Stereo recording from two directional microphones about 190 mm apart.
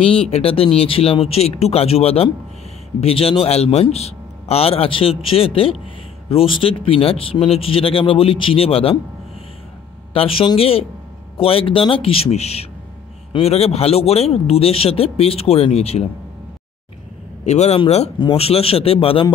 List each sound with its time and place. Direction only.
0.0 s a man's voice: 30° left (ahead or behind)
10.1 s a man's voice: 30° left (ahead or behind)
17.5 s a man's voice: 35° left (ahead or behind)